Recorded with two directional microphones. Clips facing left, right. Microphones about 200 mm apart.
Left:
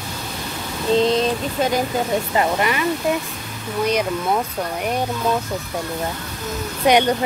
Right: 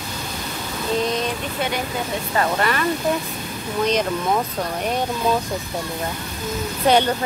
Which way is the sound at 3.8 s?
10° left (ahead or behind).